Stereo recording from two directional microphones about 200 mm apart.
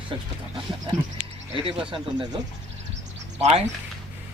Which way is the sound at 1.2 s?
5° right (ahead or behind).